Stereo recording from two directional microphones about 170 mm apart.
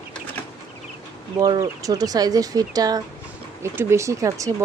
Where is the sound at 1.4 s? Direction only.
20° right (ahead or behind).